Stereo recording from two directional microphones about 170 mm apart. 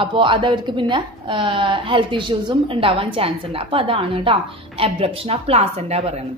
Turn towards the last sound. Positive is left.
turn(degrees=-35)  # may be behind; listen again after turning